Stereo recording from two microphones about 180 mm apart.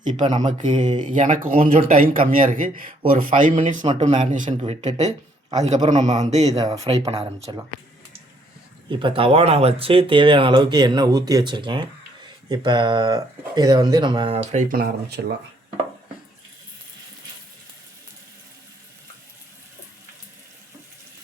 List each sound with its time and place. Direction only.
0.2 s speech: 40° right (ahead or behind)
6.5 s speech: 20° right (ahead or behind)
7.1 s speech: 35° right (ahead or behind)
8.9 s speech: 30° right (ahead or behind); by 15.2 s 55° right (ahead or behind)